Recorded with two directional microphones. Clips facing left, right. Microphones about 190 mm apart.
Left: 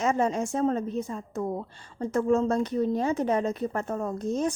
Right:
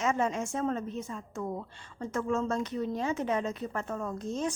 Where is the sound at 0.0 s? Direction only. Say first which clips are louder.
Left 4 dB; 35° left (ahead or behind).